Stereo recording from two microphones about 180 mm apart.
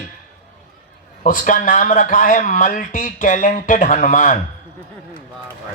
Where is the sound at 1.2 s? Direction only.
45° left (ahead or behind).